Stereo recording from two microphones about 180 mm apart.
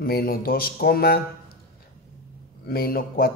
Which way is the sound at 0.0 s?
55° left (ahead or behind).